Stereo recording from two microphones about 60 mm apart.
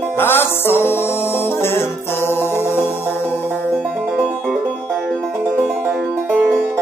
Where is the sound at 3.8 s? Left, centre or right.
Right.